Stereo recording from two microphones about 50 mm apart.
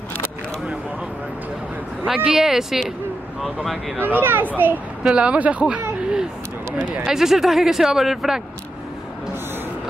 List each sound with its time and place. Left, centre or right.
2.3 s speech: centre
4.0 s speech: right
5.0 s speech: right
5.9 s a sound: centre
7.1 s speech: centre